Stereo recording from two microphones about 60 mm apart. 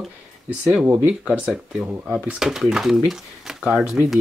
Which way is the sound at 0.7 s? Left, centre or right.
Right.